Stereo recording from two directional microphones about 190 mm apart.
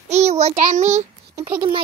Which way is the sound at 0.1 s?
35° right (ahead or behind).